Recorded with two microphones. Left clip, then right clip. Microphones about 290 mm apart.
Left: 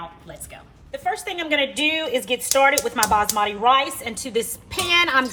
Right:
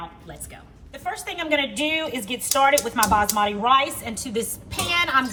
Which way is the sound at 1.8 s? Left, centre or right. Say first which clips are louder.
Left 3 dB; left.